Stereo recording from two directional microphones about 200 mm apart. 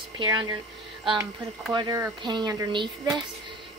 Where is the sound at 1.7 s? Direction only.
20° right (ahead or behind).